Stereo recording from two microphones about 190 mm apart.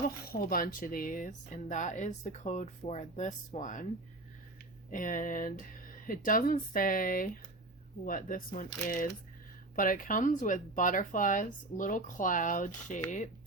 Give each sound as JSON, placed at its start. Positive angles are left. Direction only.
{"t": 0.3, "sound": "speech", "side_deg": 50}
{"t": 4.9, "sound": "speech", "side_deg": 45}